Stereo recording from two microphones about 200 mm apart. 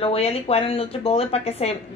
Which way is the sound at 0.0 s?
30° left (ahead or behind).